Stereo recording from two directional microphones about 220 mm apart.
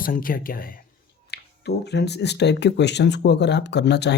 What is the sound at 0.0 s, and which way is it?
Speech, 40° left (ahead or behind).